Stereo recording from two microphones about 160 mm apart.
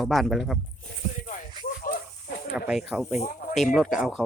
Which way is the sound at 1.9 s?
60° left (ahead or behind).